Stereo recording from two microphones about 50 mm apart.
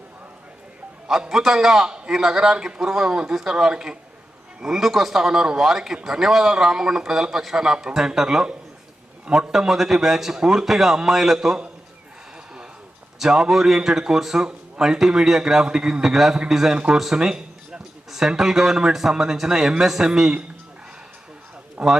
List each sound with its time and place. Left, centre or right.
1.3 s a man's voice: centre
9.5 s a man's voice: centre
13.1 s a man's voice: centre
21.8 s speech: right